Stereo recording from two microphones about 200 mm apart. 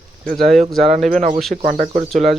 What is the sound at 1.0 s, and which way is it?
Speech, 40° right (ahead or behind).